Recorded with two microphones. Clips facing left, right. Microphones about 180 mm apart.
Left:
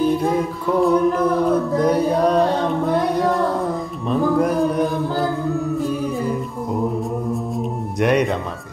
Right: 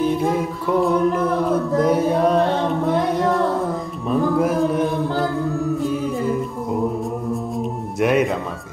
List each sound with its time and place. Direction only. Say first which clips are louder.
0.0 s a capella: left 1 dB; centre (ahead or behind)
0.8 s singing: left 4 dB; 5° right (ahead or behind)
4.1 s a capella: even; 5° right (ahead or behind)
7.5 s music: even; centre (ahead or behind)